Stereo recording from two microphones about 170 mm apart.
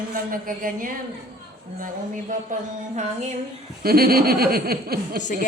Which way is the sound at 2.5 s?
45° right (ahead or behind).